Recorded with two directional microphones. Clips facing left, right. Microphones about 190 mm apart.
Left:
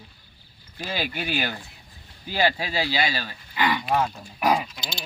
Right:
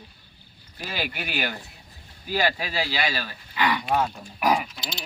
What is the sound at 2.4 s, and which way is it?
Speech, 20° left (ahead or behind).